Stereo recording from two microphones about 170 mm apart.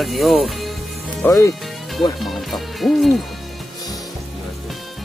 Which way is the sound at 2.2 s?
Centre (ahead or behind).